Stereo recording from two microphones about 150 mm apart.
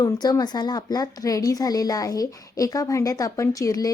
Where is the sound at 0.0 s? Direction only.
25° left (ahead or behind).